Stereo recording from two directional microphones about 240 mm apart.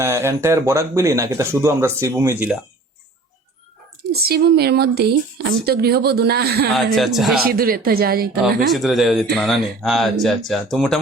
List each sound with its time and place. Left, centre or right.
0.0 s speech: centre
4.1 s speech: right
6.7 s speech: centre
7.4 s speech: right
8.7 s speech: centre